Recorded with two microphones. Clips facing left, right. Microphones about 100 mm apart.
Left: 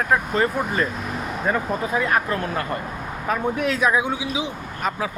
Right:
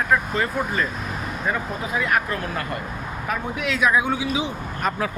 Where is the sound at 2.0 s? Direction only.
30° left (ahead or behind).